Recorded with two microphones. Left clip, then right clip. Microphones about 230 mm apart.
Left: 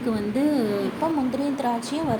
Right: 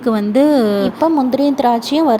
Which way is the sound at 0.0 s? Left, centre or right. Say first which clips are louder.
Right 11 dB; right.